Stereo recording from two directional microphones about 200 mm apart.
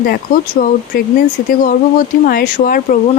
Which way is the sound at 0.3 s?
45° left (ahead or behind).